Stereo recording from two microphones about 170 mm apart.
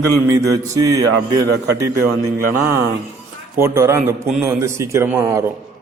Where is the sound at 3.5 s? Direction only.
15° right (ahead or behind).